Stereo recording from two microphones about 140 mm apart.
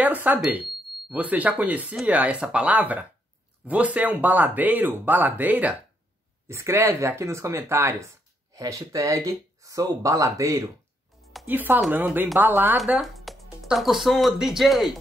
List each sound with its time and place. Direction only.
0.0 s speech: 10° right (ahead or behind)
11.4 s speech: 15° right (ahead or behind)